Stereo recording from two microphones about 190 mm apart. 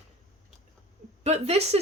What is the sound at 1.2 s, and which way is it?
Speech, 35° right (ahead or behind).